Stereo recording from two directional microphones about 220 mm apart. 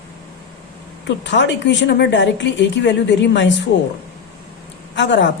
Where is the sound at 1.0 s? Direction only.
55° left (ahead or behind).